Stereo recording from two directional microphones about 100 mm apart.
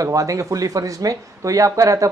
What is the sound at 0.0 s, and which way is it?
Speech, 35° right (ahead or behind).